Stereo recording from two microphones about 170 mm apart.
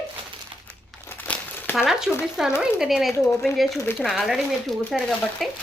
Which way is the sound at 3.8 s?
15° left (ahead or behind).